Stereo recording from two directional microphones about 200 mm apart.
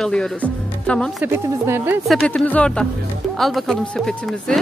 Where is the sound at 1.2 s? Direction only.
10° right (ahead or behind).